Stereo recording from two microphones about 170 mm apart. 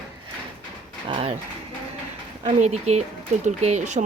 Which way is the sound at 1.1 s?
35° right (ahead or behind).